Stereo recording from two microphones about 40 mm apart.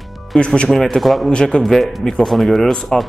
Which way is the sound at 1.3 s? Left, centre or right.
Left.